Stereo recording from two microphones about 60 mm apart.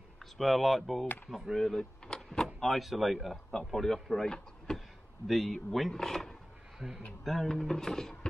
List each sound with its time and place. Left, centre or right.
0.4 s speech: centre
1.0 s speech: left
1.3 s speech: centre